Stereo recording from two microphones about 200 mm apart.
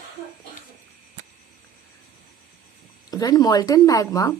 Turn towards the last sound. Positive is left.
turn(degrees=20)  # may be behind; listen again after turning